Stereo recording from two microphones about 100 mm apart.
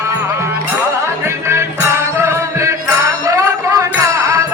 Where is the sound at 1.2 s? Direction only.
30° right (ahead or behind).